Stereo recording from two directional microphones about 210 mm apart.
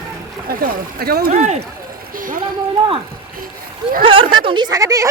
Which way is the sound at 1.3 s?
30° right (ahead or behind).